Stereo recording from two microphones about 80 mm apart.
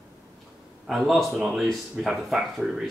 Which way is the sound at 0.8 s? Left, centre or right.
Centre.